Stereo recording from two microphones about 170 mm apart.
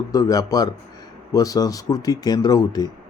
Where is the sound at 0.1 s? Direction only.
20° left (ahead or behind).